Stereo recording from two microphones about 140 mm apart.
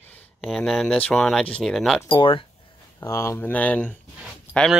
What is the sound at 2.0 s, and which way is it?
Speech, 35° left (ahead or behind).